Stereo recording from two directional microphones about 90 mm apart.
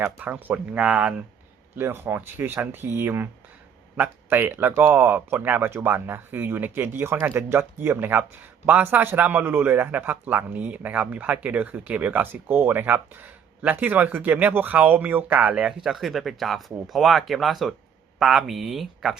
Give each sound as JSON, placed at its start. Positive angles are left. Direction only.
{"t": 0.2, "sound": "speech", "side_deg": -20}
{"t": 15.9, "sound": "speech", "side_deg": 0}